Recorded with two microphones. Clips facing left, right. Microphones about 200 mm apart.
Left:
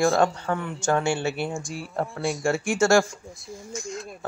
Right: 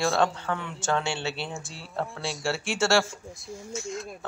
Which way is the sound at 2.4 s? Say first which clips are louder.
Left 5 dB; 50° left (ahead or behind).